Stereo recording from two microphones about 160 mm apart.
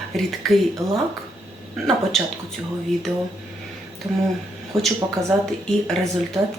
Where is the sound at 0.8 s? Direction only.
20° right (ahead or behind).